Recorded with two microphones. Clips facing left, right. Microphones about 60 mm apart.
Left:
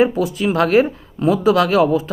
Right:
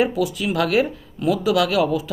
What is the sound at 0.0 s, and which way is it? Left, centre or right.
Speech, left.